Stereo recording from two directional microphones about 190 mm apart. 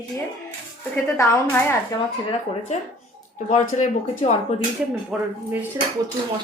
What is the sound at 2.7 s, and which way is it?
Speech, 40° left (ahead or behind).